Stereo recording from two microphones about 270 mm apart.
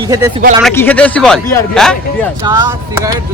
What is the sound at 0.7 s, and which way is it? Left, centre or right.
A man's voice, centre.